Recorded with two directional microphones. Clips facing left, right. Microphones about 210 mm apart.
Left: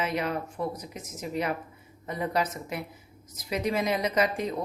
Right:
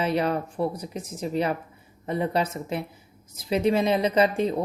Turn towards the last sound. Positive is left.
turn(degrees=-30)  # may be behind; listen again after turning